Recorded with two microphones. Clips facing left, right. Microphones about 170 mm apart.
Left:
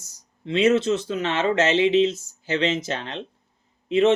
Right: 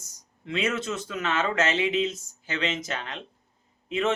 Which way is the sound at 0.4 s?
25° left (ahead or behind).